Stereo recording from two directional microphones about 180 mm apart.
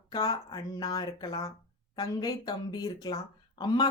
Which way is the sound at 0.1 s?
20° left (ahead or behind).